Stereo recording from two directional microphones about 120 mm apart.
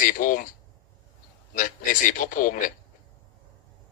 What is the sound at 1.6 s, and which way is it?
A man's voice, 90° left.